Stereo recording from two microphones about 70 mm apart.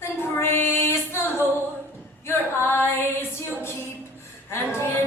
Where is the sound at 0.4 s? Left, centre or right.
Left.